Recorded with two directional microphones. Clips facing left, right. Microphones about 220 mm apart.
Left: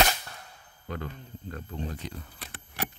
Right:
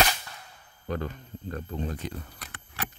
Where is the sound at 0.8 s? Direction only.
40° right (ahead or behind).